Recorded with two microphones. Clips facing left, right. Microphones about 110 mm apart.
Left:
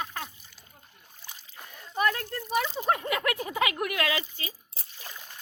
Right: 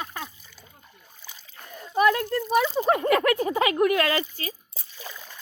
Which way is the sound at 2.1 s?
90° right.